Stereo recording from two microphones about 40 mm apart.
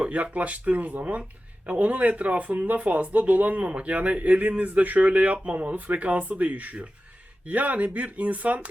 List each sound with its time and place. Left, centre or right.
0.0 s speech: right